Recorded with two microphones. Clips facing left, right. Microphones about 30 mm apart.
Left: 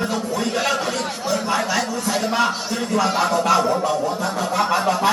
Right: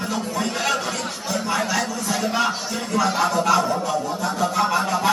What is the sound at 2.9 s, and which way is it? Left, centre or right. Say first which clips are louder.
Speech: left 1 dB; centre.